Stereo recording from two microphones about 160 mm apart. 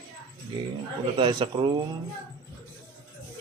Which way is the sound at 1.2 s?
30° right (ahead or behind).